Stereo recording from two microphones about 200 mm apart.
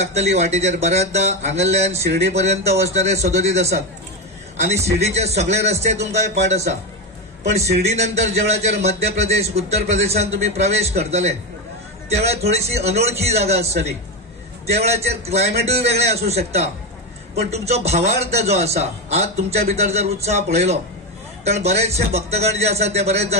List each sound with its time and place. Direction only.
0.0 s a man's voice: 35° right (ahead or behind)
7.9 s a man's voice: 35° right (ahead or behind)